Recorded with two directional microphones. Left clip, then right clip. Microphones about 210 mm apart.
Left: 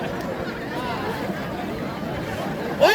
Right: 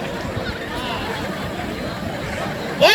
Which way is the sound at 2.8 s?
50° left (ahead or behind).